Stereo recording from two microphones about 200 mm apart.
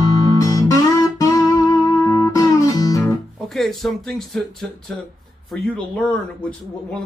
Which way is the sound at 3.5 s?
Centre (ahead or behind).